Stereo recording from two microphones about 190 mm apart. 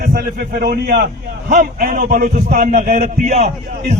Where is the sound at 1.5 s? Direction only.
45° right (ahead or behind).